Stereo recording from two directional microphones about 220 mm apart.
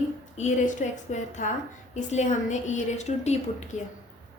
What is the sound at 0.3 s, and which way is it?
A woman's voice, 35° left (ahead or behind).